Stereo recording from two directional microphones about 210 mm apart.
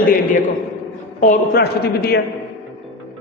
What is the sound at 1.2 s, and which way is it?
A man's voice, 45° left (ahead or behind).